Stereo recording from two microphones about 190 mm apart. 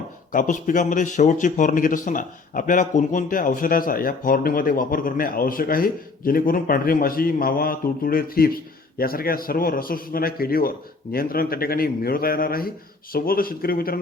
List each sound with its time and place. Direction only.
0.3 s speech: 45° left (ahead or behind)